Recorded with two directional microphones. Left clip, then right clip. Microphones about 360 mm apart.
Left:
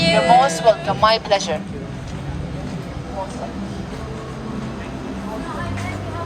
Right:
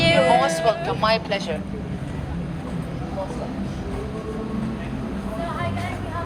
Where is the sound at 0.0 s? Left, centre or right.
Centre.